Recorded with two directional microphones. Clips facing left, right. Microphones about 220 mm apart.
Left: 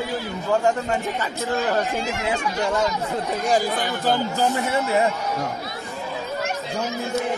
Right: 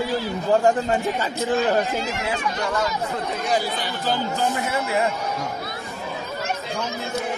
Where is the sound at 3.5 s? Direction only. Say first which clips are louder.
Left 3 dB; 50° left (ahead or behind).